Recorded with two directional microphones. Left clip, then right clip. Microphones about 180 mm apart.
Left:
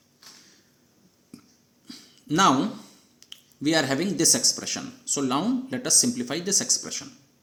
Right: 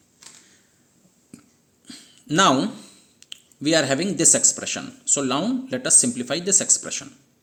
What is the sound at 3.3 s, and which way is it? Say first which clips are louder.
Speech: right 4 dB; 25° right (ahead or behind).